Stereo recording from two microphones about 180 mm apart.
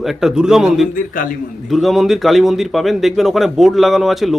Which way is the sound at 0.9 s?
50° left (ahead or behind).